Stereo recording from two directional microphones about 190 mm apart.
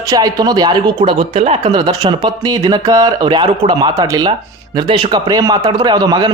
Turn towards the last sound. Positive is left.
turn(degrees=-20)  # may be behind; listen again after turning